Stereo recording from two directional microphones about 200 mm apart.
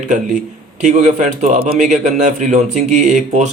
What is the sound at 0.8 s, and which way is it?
A man's voice, 35° right (ahead or behind).